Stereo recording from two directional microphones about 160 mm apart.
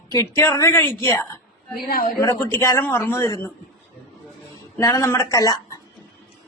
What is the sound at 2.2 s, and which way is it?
A man's voice, 20° left (ahead or behind).